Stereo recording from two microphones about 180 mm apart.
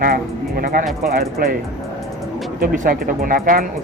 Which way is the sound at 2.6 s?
50° right (ahead or behind).